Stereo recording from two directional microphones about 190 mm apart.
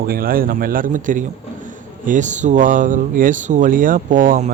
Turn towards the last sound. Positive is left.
turn(degrees=-45)  # may be behind; listen again after turning